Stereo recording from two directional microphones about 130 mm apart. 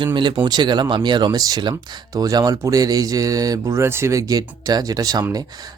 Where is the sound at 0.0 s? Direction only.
35° right (ahead or behind).